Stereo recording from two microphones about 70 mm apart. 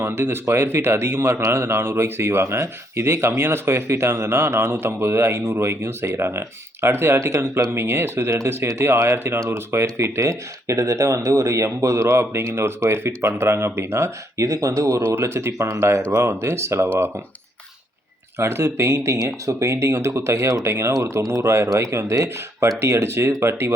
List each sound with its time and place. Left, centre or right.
0.0 s speech: right
18.3 s speech: right